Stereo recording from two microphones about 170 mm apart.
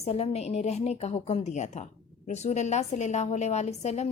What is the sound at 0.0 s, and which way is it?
A woman's voice, 40° left (ahead or behind).